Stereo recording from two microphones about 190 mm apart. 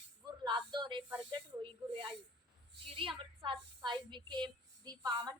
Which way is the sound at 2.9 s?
25° right (ahead or behind).